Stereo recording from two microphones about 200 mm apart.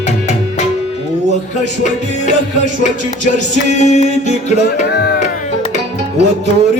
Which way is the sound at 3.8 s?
35° left (ahead or behind).